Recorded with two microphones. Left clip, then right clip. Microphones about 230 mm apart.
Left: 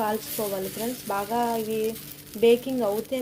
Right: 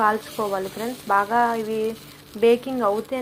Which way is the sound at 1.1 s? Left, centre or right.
Centre.